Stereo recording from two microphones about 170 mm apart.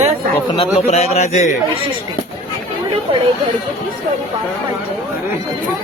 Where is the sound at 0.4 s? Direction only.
35° left (ahead or behind).